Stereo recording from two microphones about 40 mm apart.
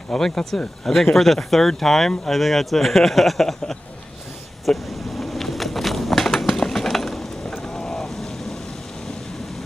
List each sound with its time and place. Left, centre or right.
0.2 s speech: centre
4.6 s a sound: centre
7.6 s boat: centre